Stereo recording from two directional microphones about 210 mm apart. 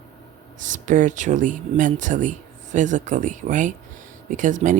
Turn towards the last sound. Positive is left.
turn(degrees=-35)  # may be behind; listen again after turning